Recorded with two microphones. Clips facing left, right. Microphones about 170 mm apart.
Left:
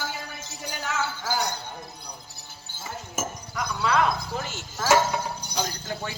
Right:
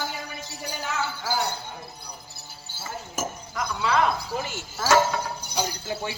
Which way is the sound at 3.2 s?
5° right (ahead or behind).